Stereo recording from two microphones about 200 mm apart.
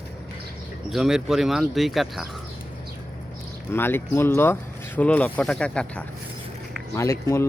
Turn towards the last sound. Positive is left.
turn(degrees=15)  # may be behind; listen again after turning